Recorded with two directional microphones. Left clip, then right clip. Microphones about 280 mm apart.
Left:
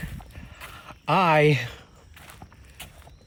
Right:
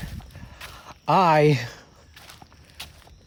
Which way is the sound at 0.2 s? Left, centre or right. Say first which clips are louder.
Right 1 dB; centre.